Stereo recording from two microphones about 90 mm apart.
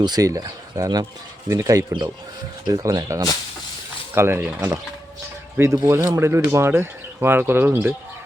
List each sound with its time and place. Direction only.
0.0 s speech: 45° right (ahead or behind)
4.1 s speech: 25° right (ahead or behind)
5.5 s speech: 35° right (ahead or behind)